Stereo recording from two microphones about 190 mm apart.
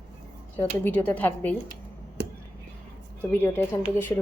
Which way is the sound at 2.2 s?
60° right (ahead or behind).